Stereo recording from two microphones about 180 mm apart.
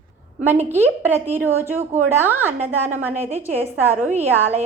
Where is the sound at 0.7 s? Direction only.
10° right (ahead or behind).